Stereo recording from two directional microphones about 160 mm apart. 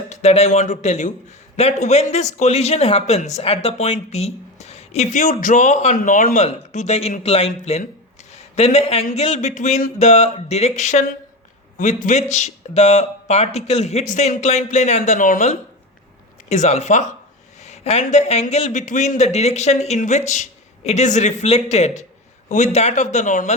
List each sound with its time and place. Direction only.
0.1 s a man's voice: 40° left (ahead or behind)
8.3 s a sound: 40° left (ahead or behind)
9.1 s a man's voice: 45° left (ahead or behind)